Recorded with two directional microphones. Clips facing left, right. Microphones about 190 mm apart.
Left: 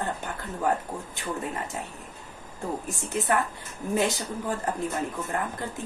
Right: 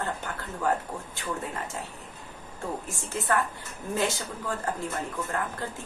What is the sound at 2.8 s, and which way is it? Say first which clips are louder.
Speech: left 3 dB; 15° left (ahead or behind).